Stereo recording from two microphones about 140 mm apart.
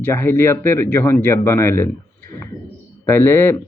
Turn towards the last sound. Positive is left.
turn(degrees=15)  # may be behind; listen again after turning